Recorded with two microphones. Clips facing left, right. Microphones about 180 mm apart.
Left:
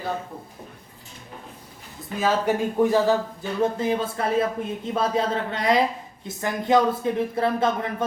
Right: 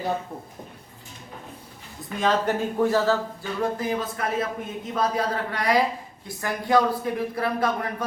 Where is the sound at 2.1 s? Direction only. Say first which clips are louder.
Left 1 dB; 10° left (ahead or behind).